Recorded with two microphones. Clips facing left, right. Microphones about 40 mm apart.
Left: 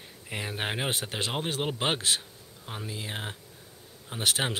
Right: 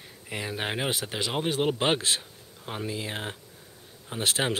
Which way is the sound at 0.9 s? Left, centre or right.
Left.